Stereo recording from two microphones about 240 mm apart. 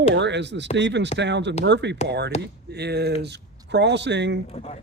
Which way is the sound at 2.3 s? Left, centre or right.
Left.